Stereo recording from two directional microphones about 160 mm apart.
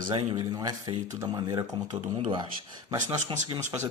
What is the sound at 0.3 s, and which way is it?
Speech, 25° right (ahead or behind).